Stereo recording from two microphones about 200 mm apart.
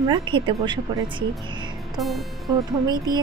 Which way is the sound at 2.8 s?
20° right (ahead or behind).